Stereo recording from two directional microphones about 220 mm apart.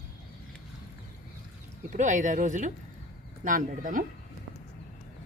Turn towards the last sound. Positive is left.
turn(degrees=-35)  # may be behind; listen again after turning